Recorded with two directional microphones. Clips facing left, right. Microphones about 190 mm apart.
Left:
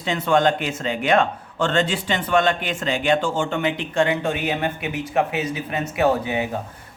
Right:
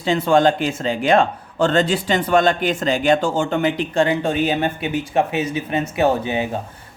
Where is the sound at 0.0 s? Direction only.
30° right (ahead or behind).